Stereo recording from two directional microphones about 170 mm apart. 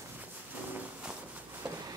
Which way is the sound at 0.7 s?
10° right (ahead or behind).